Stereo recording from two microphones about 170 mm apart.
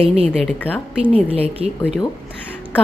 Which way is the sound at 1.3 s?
35° right (ahead or behind).